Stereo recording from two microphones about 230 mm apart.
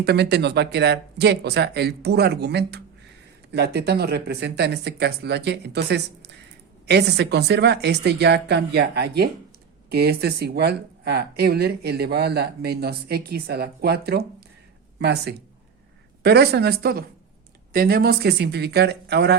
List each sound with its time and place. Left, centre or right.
0.0 s speech: right